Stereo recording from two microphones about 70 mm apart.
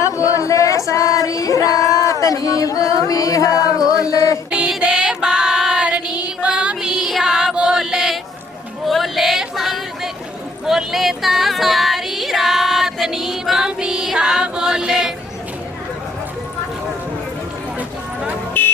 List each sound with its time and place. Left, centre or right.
0.0 s a sound: left
4.1 s mantra: left
4.9 s female singing: centre
8.8 s a sound: centre
10.7 s female singing: centre
18.6 s music: left